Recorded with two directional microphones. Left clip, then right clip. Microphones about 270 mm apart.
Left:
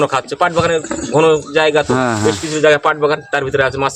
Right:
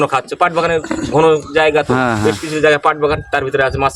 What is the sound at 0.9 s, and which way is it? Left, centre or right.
Speech, right.